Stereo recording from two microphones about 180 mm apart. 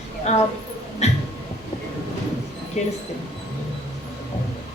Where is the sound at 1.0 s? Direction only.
40° left (ahead or behind).